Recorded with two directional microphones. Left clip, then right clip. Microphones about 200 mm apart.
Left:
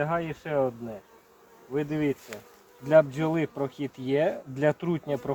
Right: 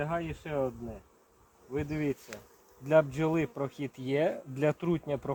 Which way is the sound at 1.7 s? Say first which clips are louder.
Left 5 dB; centre (ahead or behind).